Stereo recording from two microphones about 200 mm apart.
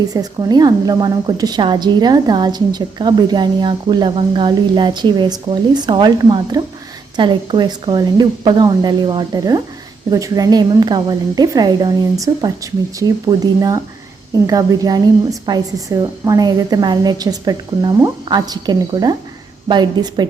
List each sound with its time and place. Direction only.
0.1 s a woman's voice: 20° right (ahead or behind)